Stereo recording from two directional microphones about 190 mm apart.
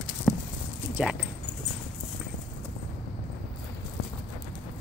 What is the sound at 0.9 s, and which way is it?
Speech, 5° right (ahead or behind).